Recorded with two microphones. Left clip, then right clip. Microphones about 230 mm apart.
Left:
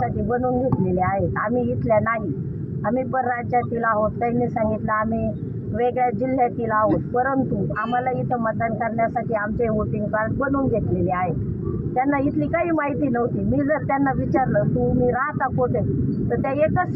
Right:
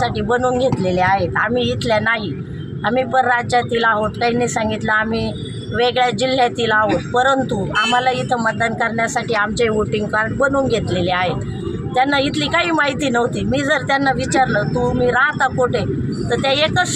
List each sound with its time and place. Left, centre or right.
0.3 s speech: right
11.9 s speech: right